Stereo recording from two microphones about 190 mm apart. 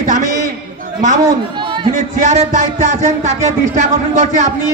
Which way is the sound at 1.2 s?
25° right (ahead or behind).